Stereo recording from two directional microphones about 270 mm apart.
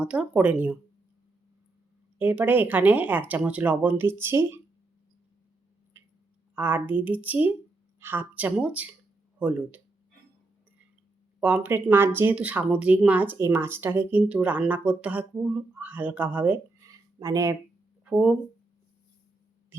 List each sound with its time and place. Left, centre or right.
0.0 s speech: centre
2.1 s speech: centre
6.6 s speech: centre
11.3 s speech: centre